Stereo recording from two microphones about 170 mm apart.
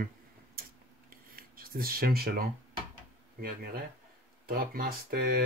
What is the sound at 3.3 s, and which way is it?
Speech, 60° right (ahead or behind).